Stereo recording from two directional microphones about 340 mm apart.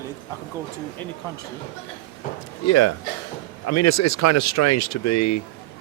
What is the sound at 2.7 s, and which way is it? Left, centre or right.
Speech, left.